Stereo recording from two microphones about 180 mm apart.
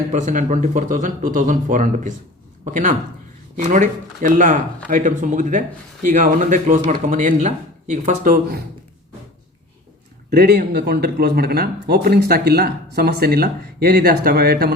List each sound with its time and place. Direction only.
0.1 s speech: 45° right (ahead or behind)
3.5 s speech: 45° right (ahead or behind)
10.2 s speech: 65° right (ahead or behind)